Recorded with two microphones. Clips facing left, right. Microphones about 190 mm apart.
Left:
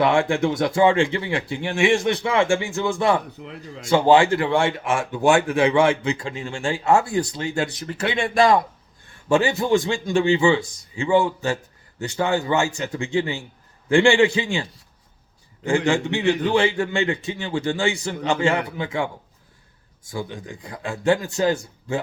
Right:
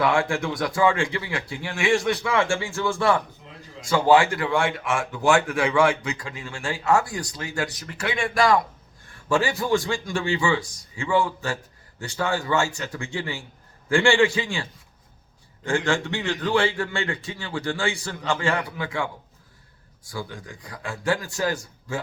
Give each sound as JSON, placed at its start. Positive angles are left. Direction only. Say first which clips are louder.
{"t": 0.0, "sound": "speech", "louder": "left 4 dB", "side_deg": 25}
{"t": 3.4, "sound": "speech", "louder": "left 9 dB", "side_deg": 75}
{"t": 3.8, "sound": "speech", "louder": "left 3 dB", "side_deg": 25}
{"t": 15.9, "sound": "speech", "louder": "left 5 dB", "side_deg": 20}